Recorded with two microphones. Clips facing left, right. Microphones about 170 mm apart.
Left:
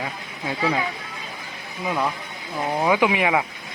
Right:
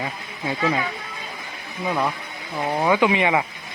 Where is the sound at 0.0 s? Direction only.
Centre (ahead or behind).